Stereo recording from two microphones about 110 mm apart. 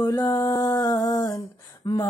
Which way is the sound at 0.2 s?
30° left (ahead or behind).